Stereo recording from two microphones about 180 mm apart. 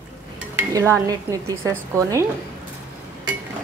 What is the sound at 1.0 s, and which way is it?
A woman's voice, 20° right (ahead or behind).